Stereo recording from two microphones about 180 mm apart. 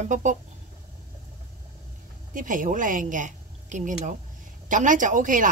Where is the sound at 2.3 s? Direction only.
45° right (ahead or behind).